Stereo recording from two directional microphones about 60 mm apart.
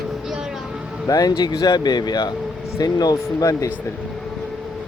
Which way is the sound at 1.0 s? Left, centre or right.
Left.